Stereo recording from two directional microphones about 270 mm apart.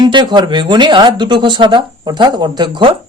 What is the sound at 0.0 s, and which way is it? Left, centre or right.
Speech, centre.